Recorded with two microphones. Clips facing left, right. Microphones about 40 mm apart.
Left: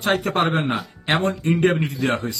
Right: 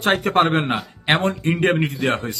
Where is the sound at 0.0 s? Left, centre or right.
Right.